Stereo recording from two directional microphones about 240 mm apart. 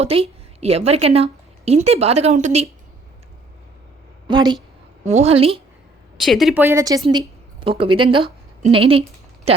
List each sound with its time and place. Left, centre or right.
0.0 s a woman's voice: right
4.3 s a woman's voice: centre
6.1 s speech: centre
7.1 s a sound: centre
7.8 s speech: right